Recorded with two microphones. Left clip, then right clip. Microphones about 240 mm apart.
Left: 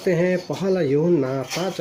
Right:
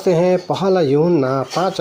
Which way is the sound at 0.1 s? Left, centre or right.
Right.